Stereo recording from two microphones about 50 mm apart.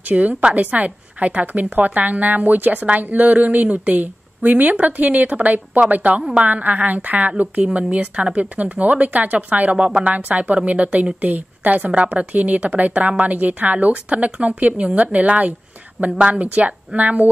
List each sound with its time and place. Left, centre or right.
0.1 s a woman's voice: right
9.8 s speech: centre
10.1 s a woman's voice: right